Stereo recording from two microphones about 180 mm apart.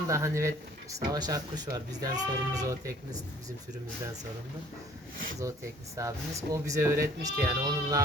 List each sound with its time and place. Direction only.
0.1 s speech: 15° right (ahead or behind)
6.0 s speech: 15° right (ahead or behind)